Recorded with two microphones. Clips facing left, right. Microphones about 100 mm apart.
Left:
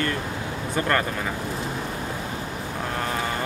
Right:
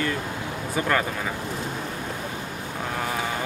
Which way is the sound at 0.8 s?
5° right (ahead or behind).